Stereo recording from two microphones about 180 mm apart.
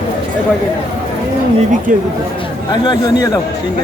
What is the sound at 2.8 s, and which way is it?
Speech, 25° left (ahead or behind).